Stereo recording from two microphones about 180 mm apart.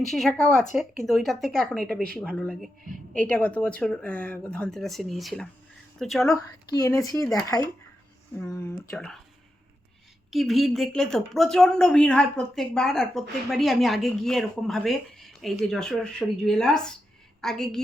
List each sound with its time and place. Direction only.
0.0 s a woman's voice: centre (ahead or behind)
6.3 s speech: 20° left (ahead or behind)
8.9 s a woman's voice: 5° left (ahead or behind)
10.3 s a woman's voice: centre (ahead or behind)